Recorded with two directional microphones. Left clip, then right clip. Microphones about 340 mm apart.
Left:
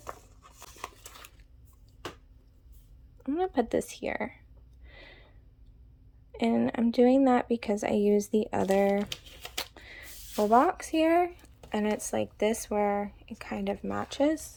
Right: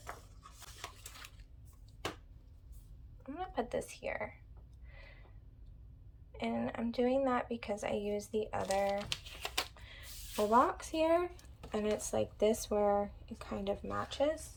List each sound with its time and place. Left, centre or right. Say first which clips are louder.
3.2 s speech: left 10 dB; centre
4.9 s a sound: left 7 dB; centre
6.3 s speech: left 9 dB; centre